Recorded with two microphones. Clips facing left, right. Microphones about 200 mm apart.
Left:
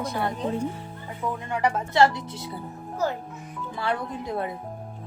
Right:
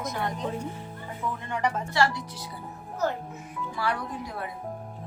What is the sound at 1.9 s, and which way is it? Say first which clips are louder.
Speech: left 5 dB; 20° left (ahead or behind).